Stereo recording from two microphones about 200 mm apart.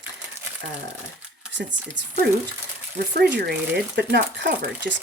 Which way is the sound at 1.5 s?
65° right (ahead or behind).